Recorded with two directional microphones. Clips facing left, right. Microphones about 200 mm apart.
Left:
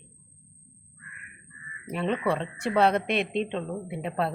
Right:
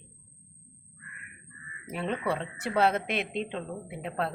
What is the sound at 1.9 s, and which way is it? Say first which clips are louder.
Speech: left 4 dB; 5° right (ahead or behind).